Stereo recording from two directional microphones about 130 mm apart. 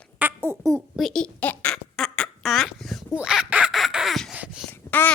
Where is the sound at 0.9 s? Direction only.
5° left (ahead or behind).